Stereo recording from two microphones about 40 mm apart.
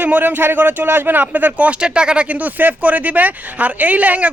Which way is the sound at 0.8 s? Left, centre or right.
Right.